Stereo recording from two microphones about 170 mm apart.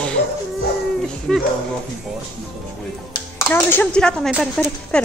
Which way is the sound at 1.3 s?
Centre (ahead or behind).